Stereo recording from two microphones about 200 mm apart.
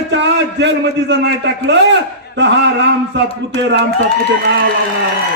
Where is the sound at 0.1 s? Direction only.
60° right (ahead or behind).